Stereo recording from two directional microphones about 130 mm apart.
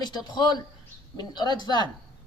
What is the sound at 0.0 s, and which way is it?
Speech, 35° left (ahead or behind).